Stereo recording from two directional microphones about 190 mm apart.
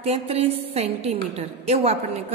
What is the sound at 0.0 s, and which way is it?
A woman's voice, 30° right (ahead or behind).